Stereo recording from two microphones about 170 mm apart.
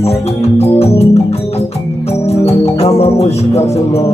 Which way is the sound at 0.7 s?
40° left (ahead or behind).